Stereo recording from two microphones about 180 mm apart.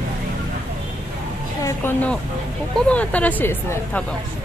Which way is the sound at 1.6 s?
10° left (ahead or behind).